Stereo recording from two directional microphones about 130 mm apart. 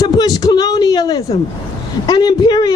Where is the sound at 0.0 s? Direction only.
30° left (ahead or behind).